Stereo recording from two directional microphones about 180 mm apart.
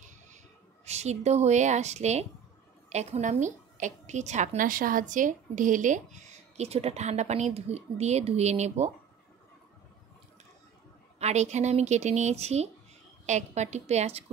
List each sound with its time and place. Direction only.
0.8 s a woman's voice: 40° right (ahead or behind)
11.1 s a woman's voice: 40° right (ahead or behind)